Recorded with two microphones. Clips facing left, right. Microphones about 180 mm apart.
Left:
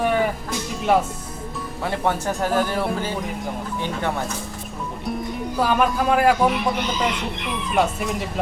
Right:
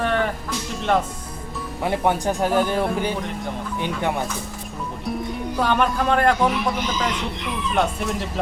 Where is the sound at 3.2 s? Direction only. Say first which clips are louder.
Even; centre (ahead or behind).